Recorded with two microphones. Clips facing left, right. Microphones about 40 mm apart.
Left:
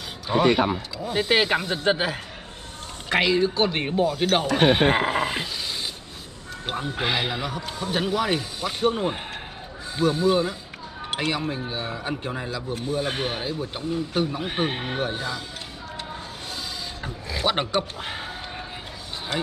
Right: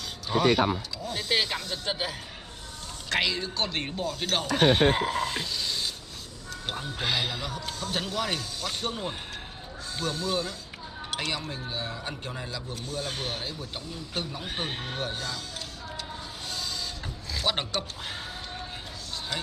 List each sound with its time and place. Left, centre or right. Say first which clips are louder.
0.3 s speech: left 3 dB; centre
1.3 s a man's voice: left 6 dB; left
3.1 s a man's voice: left 7 dB; centre
4.8 s a man's voice: left 4 dB; left; by 12.7 s centre
12.8 s a man's voice: left 7 dB; left
17.0 s speech: left 6 dB; left